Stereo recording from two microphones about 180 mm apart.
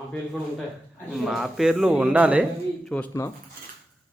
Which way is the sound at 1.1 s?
Centre (ahead or behind).